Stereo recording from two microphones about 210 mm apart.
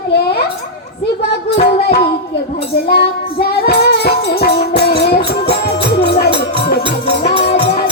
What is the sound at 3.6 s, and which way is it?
Music, 50° left (ahead or behind).